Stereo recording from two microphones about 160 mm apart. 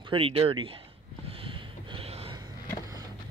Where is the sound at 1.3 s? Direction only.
35° right (ahead or behind).